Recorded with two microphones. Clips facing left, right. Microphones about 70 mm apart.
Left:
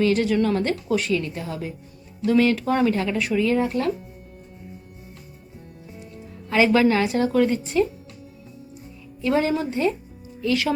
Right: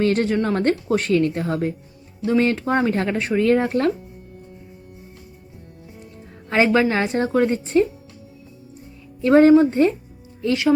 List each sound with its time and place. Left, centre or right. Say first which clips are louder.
0.0 s a woman's voice: right 1 dB; right
2.2 s speech: even; right
3.4 s a woman's voice: right 6 dB; right
6.5 s speech: even; right
9.2 s speech: right 10 dB; right
10.4 s speech: right 1 dB; right